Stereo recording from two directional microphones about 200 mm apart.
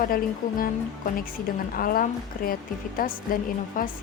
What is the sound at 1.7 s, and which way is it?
A woman's voice, 45° left (ahead or behind).